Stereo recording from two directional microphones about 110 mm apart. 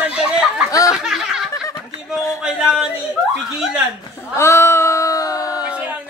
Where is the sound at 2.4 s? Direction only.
5° right (ahead or behind).